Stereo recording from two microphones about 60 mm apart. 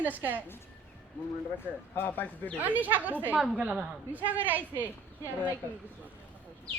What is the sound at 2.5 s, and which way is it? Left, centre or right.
Speech, right.